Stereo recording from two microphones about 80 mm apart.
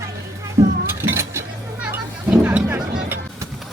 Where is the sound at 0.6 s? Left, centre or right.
Right.